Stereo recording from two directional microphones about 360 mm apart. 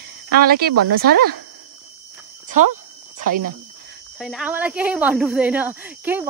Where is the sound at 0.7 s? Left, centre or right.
Right.